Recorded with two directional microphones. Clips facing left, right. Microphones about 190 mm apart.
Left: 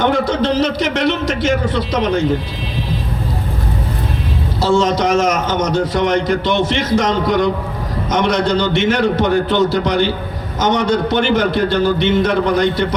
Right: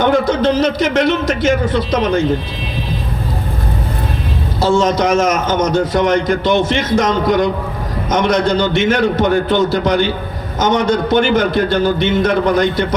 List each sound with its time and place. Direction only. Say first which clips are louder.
0.0 s a man's voice: right 2 dB; 45° right (ahead or behind)
4.6 s a man's voice: right 1 dB; 45° right (ahead or behind)